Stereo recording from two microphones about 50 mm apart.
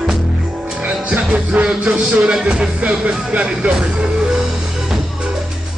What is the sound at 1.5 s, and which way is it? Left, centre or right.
Music, right.